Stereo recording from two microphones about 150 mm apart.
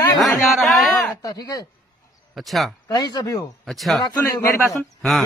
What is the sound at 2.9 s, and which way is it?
Speech, 30° left (ahead or behind).